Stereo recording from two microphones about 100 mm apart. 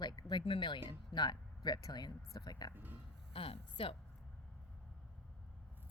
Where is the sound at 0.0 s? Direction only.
45° left (ahead or behind).